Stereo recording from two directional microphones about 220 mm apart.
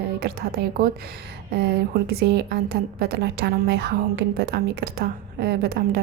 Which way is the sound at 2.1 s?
50° right (ahead or behind).